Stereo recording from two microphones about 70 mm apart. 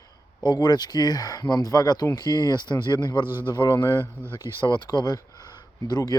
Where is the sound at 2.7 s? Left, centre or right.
Left.